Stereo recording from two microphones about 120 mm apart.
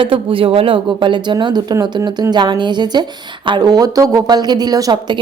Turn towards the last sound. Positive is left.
turn(degrees=-35)  # may be behind; listen again after turning